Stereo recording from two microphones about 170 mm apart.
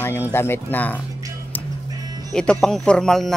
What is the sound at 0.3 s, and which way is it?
Speech, 15° left (ahead or behind).